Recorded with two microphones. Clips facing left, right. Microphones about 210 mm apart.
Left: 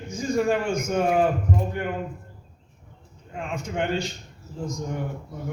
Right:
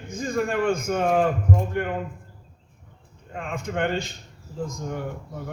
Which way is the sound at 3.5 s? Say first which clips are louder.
Right 1 dB; 55° right (ahead or behind).